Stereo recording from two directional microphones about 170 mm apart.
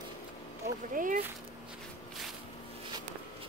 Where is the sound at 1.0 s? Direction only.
55° right (ahead or behind).